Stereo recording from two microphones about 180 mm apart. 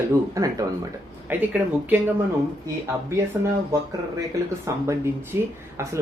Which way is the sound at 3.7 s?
15° right (ahead or behind).